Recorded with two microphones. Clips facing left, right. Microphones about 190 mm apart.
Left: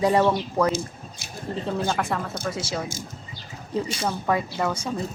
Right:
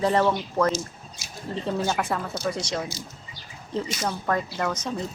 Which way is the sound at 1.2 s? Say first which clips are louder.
Left 2 dB; 60° left (ahead or behind).